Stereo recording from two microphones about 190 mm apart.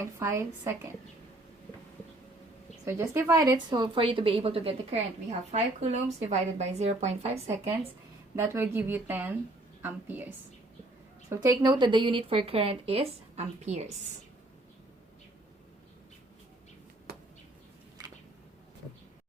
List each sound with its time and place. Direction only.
0.0 s speech: 15° right (ahead or behind)
2.8 s a woman's voice: 15° right (ahead or behind); by 7.7 s 35° right (ahead or behind)
8.4 s speech: 10° right (ahead or behind)
11.3 s a woman's voice: 20° right (ahead or behind); by 13.8 s 35° right (ahead or behind)
17.1 s a sound: 55° right (ahead or behind)